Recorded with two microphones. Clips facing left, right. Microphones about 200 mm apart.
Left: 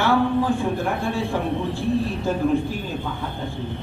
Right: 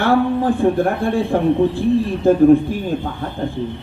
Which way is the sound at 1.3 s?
55° right (ahead or behind).